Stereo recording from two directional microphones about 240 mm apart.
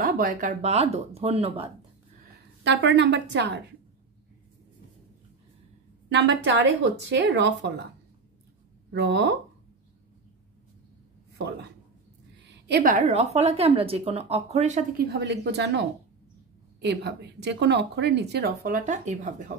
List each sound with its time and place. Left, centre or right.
0.0 s a woman's voice: right
2.6 s a woman's voice: right
6.0 s a woman's voice: right
8.9 s a woman's voice: right
12.4 s a woman's voice: right
16.8 s a woman's voice: right